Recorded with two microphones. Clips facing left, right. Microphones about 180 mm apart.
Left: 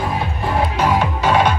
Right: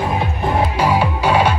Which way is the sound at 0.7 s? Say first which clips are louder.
Right 1 dB; 10° right (ahead or behind).